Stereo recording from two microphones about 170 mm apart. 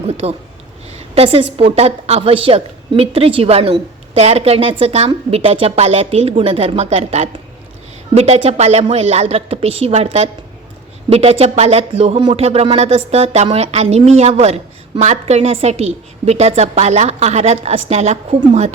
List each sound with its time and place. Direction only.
0.0 s speech: 40° right (ahead or behind)